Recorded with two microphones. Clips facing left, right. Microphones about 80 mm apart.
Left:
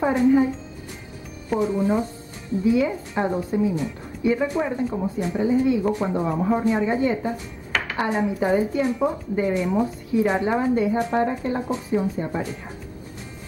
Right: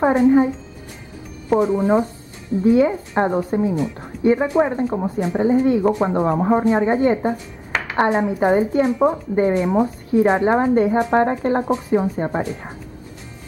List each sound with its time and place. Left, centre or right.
0.0 s speech: right
1.8 s speech: right
2.6 s a woman's voice: right
11.6 s speech: right